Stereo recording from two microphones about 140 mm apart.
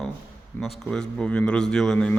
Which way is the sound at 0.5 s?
15° left (ahead or behind).